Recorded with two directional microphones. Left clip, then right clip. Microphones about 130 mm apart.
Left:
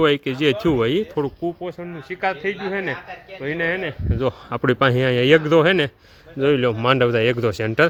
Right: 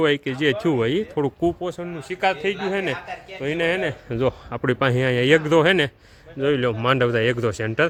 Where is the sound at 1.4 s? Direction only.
90° right.